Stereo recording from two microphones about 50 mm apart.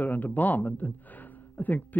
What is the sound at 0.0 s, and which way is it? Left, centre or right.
A man's voice, left.